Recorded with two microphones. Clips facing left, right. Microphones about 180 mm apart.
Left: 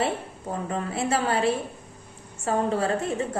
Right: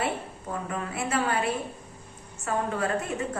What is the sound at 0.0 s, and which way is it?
A woman's voice, 30° left (ahead or behind).